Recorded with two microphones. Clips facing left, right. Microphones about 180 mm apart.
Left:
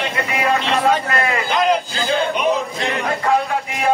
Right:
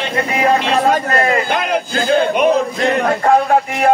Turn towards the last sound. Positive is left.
turn(degrees=-50)  # may be behind; listen again after turning